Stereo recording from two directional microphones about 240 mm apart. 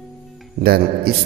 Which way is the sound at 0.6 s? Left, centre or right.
Right.